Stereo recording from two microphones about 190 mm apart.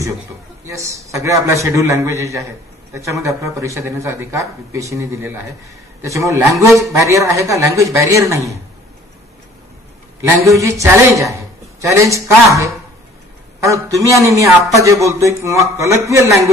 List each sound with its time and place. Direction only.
0.7 s a man's voice: 15° right (ahead or behind)
10.4 s a man's voice: 15° right (ahead or behind)